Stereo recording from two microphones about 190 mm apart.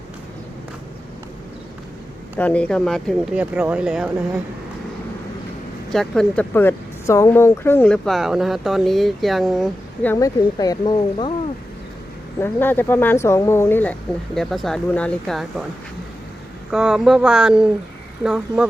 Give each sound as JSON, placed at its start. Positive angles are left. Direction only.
{"t": 2.4, "sound": "speech", "side_deg": 5}
{"t": 5.9, "sound": "speech", "side_deg": 5}
{"t": 10.1, "sound": "speech", "side_deg": 15}
{"t": 12.4, "sound": "speech", "side_deg": 10}
{"t": 16.7, "sound": "speech", "side_deg": -5}